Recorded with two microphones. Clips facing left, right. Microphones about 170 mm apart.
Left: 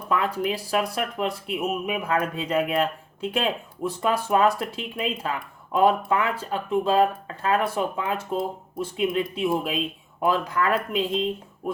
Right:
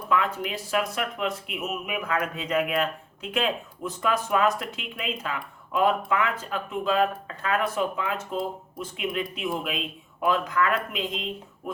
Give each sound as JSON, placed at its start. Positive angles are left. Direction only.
{"t": 0.1, "sound": "speech", "side_deg": 35}